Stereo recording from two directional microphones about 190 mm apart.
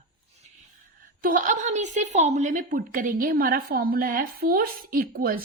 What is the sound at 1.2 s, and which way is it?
A woman's voice, 45° right (ahead or behind).